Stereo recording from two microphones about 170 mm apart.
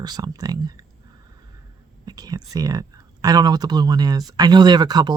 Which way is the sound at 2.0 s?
20° right (ahead or behind).